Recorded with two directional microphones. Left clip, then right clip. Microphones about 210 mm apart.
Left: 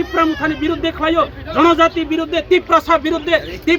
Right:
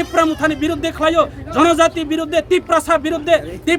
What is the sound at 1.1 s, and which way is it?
A man's voice, 15° right (ahead or behind).